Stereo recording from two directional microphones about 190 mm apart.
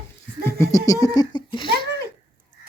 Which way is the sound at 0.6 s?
15° left (ahead or behind).